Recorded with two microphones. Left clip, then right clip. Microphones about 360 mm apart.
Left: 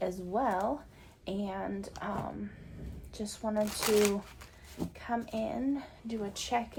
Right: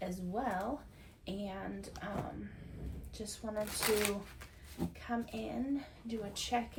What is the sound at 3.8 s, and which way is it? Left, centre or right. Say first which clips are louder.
Speech: left 5 dB; centre.